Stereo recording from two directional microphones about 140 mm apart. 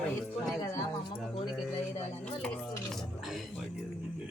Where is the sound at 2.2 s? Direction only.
5° left (ahead or behind).